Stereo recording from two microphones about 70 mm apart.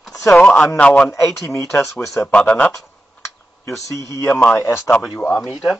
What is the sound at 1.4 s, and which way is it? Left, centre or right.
Speech, left.